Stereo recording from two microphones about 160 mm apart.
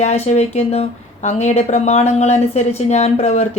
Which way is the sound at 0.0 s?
45° left (ahead or behind).